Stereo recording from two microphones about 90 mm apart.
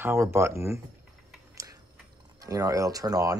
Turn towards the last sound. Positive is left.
turn(degrees=-40)  # may be behind; listen again after turning